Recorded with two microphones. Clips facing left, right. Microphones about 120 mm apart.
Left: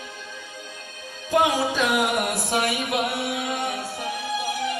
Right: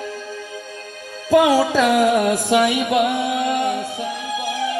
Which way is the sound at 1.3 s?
90° right.